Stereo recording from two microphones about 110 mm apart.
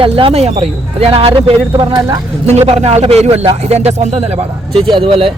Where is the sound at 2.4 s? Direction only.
70° right (ahead or behind).